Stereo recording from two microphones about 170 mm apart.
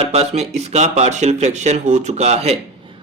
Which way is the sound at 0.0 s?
40° right (ahead or behind).